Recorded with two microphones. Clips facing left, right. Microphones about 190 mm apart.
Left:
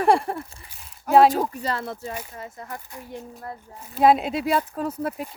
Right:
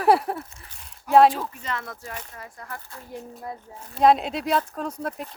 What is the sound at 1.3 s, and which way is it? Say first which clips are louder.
Speech: left 3 dB; 45° left (ahead or behind).